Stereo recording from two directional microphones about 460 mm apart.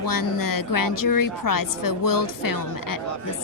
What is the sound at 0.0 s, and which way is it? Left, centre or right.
A woman's voice, left.